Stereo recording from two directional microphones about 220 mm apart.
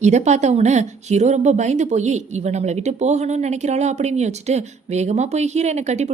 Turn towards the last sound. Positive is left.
turn(degrees=-30)  # may be behind; listen again after turning